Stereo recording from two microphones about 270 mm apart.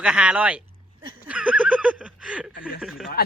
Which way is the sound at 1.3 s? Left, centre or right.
Centre.